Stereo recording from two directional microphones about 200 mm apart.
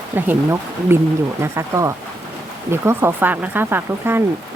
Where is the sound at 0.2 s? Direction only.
10° right (ahead or behind).